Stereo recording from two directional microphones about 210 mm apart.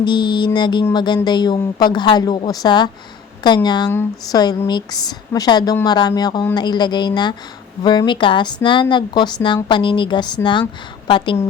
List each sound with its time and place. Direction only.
0.0 s speech: 20° left (ahead or behind)